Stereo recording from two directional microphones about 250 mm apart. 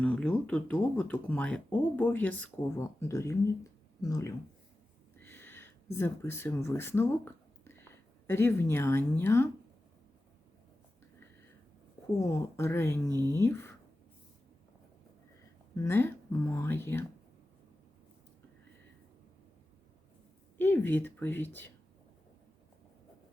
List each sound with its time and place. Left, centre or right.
0.0 s speech: centre
5.2 s a sound: centre
8.3 s speech: centre
12.1 s speech: centre
13.1 s speech: centre
13.3 s speech: centre
15.7 s speech: centre
20.6 s speech: centre